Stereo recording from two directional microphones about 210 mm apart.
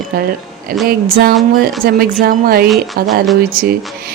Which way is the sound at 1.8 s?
45° right (ahead or behind).